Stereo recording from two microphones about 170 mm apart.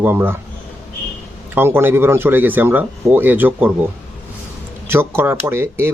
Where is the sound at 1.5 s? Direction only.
15° right (ahead or behind).